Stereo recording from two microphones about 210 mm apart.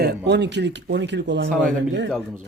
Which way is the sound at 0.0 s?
55° right (ahead or behind).